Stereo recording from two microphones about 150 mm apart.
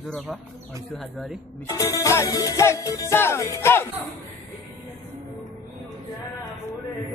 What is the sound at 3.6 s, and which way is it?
Speech, 15° left (ahead or behind).